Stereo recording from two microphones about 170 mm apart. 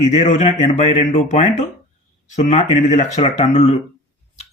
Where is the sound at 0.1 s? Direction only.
45° left (ahead or behind).